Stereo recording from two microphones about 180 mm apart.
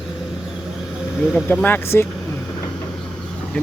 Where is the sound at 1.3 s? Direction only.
10° left (ahead or behind).